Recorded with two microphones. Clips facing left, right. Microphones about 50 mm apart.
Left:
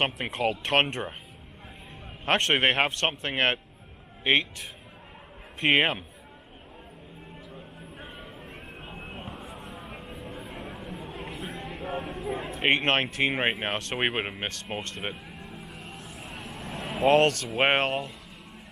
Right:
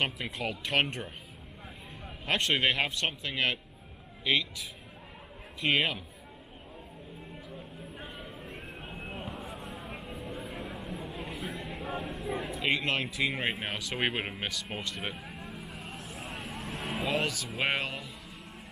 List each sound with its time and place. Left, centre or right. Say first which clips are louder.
0.0 s speech: left 6 dB; left
2.2 s a man's voice: left 5 dB; left
5.6 s speech: left 5 dB; left
8.0 s a sound: left 1 dB; centre
11.1 s chatter: left 1 dB; centre
12.0 s speech: left 3 dB; centre
12.4 s speech: left 7 dB; left
13.9 s speech: left 2 dB; left
14.7 s speech: left 4 dB; left
15.1 s vehicle: even; centre
17.0 s speech: left 12 dB; left
17.6 s speech: left 7 dB; left